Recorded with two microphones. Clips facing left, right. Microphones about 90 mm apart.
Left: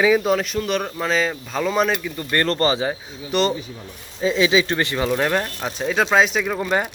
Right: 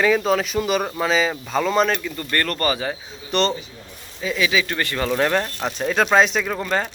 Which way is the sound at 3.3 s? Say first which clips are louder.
Left 1 dB; 5° left (ahead or behind).